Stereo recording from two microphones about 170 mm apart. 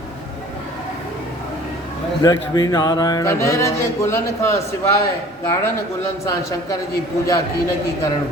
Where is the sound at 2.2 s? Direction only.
20° left (ahead or behind).